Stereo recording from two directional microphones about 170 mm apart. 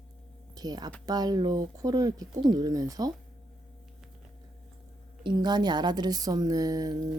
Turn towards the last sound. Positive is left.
turn(degrees=-20)  # may be behind; listen again after turning